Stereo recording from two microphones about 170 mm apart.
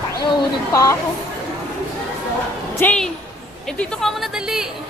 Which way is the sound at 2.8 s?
5° left (ahead or behind).